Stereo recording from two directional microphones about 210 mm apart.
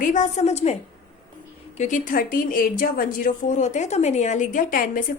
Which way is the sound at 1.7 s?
35° left (ahead or behind).